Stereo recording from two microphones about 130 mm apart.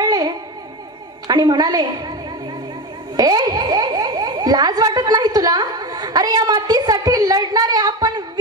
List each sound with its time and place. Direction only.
0.0 s music: 30° right (ahead or behind)
1.2 s a woman's voice: 30° right (ahead or behind)
3.2 s speech: 30° right (ahead or behind)